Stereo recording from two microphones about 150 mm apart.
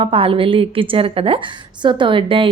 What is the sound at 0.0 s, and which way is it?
A woman's voice, 40° right (ahead or behind).